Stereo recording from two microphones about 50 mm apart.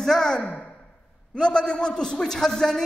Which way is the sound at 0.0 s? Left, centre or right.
Centre.